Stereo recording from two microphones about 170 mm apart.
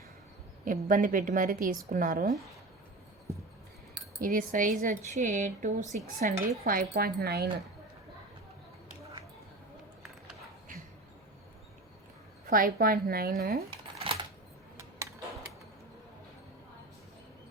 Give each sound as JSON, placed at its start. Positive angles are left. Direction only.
{"t": 0.6, "sound": "speech", "side_deg": -50}
{"t": 4.2, "sound": "a woman's voice", "side_deg": -50}
{"t": 12.5, "sound": "a woman's voice", "side_deg": -55}
{"t": 14.0, "sound": "coin", "side_deg": -30}